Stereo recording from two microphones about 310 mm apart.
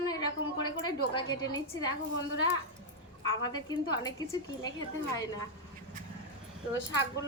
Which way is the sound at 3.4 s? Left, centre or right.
Centre.